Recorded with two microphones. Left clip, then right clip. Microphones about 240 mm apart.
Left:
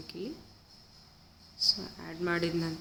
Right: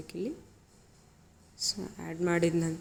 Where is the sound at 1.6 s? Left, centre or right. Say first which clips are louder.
Left 5 dB; centre.